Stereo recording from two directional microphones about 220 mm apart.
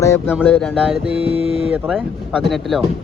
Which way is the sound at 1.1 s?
25° right (ahead or behind).